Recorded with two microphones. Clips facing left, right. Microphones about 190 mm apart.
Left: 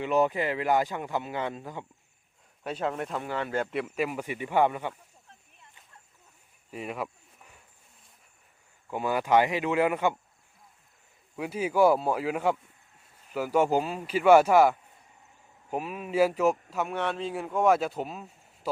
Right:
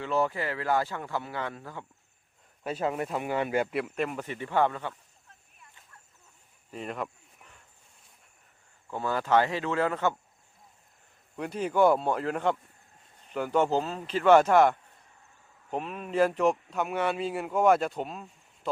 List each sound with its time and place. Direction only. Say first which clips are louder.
0.0 s speech: left 3 dB; 15° left (ahead or behind)
2.6 s speech: right 1 dB; 5° right (ahead or behind)
3.2 s speech: right 2 dB; 15° right (ahead or behind); by 4.9 s 15° left (ahead or behind)
6.7 s a sound: left 1 dB; 5° left (ahead or behind)
8.9 s speech: left 1 dB; 15° left (ahead or behind)
11.3 s speech: left 1 dB; 5° left (ahead or behind)